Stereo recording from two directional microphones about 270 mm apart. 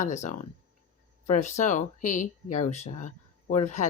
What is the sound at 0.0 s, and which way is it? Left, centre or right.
Speech, left.